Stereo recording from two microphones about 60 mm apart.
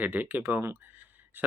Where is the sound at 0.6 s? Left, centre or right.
Right.